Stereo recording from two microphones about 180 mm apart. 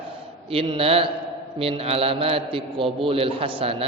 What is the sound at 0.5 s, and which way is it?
A man's voice, 30° right (ahead or behind).